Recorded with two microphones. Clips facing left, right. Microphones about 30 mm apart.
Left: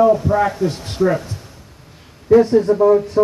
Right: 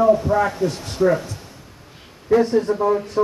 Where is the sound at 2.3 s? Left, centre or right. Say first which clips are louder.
Left 5 dB; centre.